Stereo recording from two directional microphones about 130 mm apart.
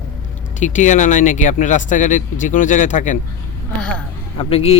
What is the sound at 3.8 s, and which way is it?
Speech, 5° left (ahead or behind).